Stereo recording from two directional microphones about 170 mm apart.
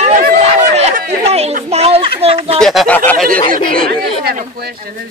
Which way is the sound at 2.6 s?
Centre (ahead or behind).